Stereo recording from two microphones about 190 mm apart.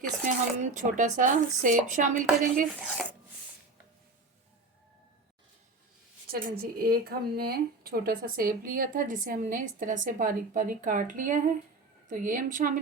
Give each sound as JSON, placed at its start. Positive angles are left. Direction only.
{"t": 0.3, "sound": "a woman's voice", "side_deg": -40}
{"t": 6.3, "sound": "a woman's voice", "side_deg": -50}